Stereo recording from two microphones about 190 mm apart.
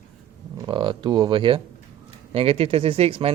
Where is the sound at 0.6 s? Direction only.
25° right (ahead or behind).